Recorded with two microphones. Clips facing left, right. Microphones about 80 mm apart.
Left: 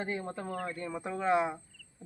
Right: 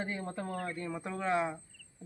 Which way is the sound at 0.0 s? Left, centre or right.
Centre.